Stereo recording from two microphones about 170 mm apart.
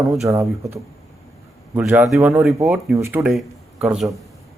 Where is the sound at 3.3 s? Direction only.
Centre (ahead or behind).